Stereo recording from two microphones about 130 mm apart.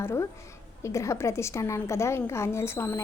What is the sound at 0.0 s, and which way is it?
A woman's voice, 20° left (ahead or behind).